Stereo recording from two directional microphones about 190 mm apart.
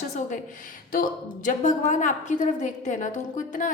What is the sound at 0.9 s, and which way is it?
A woman's voice, 45° left (ahead or behind).